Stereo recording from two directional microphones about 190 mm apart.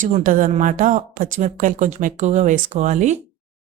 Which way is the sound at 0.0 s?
45° right (ahead or behind).